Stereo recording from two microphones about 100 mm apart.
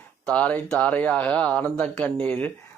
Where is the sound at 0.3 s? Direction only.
10° left (ahead or behind).